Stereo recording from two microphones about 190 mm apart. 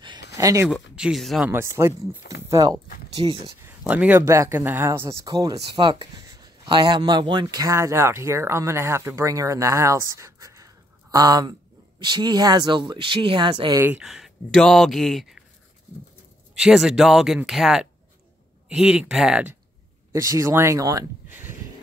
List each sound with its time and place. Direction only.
0.4 s speech: 15° right (ahead or behind)
0.9 s speech: centre (ahead or behind)
1.5 s speech: 15° right (ahead or behind)
3.2 s speech: 30° right (ahead or behind)
3.6 s speech: 10° right (ahead or behind); by 13.7 s 25° right (ahead or behind)
13.7 s speech: 10° right (ahead or behind)
16.5 s speech: centre (ahead or behind)
20.1 s speech: 15° right (ahead or behind)